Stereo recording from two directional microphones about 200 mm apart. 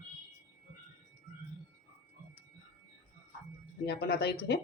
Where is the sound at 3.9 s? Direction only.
50° left (ahead or behind).